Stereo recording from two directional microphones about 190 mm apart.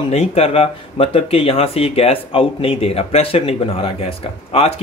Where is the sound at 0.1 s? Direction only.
30° left (ahead or behind).